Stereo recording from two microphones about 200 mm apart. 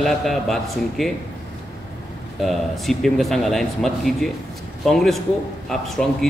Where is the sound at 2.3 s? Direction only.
Centre (ahead or behind).